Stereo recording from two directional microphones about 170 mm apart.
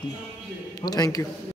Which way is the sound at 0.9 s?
25° left (ahead or behind).